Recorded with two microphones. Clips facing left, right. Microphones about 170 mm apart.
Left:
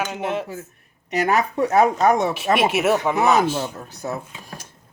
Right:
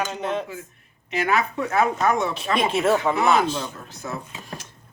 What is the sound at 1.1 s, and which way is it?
Speech, 40° left (ahead or behind).